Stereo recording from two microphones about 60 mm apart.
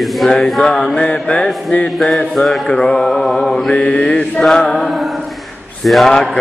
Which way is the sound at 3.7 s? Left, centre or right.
Centre.